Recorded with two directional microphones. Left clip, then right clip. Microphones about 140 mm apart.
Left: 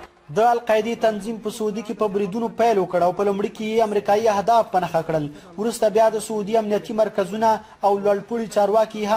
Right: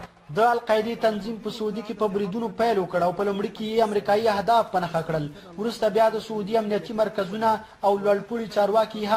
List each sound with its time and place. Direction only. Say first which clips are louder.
0.3 s speech: left 3 dB; 40° left (ahead or behind)
2.5 s speech: left 4 dB; 40° left (ahead or behind)